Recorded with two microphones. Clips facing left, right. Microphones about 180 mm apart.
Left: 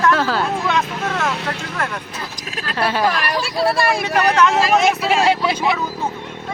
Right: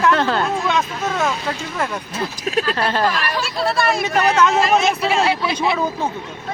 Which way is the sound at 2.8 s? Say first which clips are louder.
Left 1 dB; 10° left (ahead or behind).